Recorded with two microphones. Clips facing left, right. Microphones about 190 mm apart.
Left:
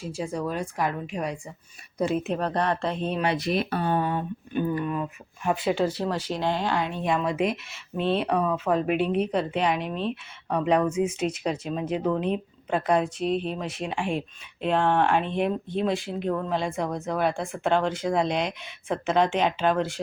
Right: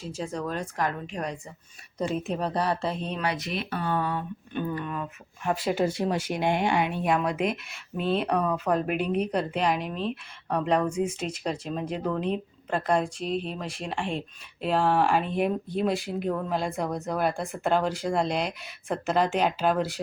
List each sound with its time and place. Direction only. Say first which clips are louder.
0.0 s a woman's voice: left 2 dB; 10° left (ahead or behind)
3.2 s speech: left 5 dB; 30° left (ahead or behind)
3.8 s speech: left 3 dB; 20° left (ahead or behind)
4.5 s a woman's voice: left 4 dB; 10° left (ahead or behind)
6.0 s speech: right 1 dB; 10° right (ahead or behind)
7.0 s speech: left 1 dB; 5° right (ahead or behind)